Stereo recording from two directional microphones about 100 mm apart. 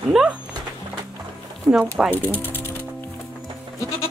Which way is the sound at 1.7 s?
10° right (ahead or behind).